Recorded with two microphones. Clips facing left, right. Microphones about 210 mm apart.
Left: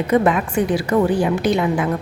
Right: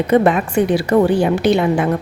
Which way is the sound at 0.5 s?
70° right (ahead or behind).